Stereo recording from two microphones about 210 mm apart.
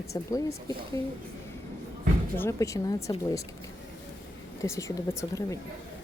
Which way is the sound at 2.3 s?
10° left (ahead or behind).